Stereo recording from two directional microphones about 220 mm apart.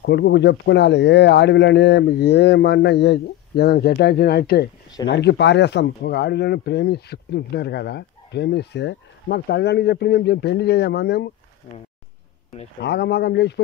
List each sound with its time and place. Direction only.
0.0 s speech: 50° left (ahead or behind)
12.8 s speech: 50° left (ahead or behind)